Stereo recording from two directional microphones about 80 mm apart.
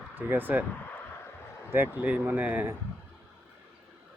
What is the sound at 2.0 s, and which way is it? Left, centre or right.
Speech, centre.